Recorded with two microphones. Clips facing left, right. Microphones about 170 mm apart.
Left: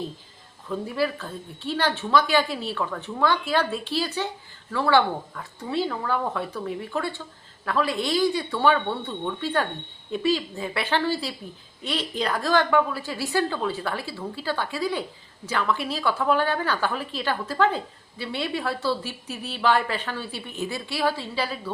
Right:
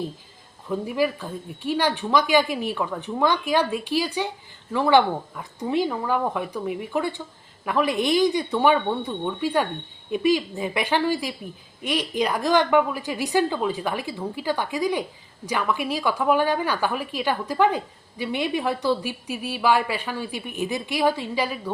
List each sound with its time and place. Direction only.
0.7 s speech: 15° right (ahead or behind)